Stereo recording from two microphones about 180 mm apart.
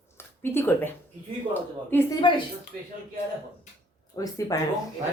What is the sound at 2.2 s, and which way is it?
Speech, 25° left (ahead or behind).